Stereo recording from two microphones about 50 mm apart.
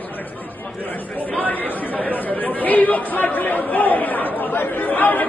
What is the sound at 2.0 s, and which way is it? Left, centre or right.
Chatter, left.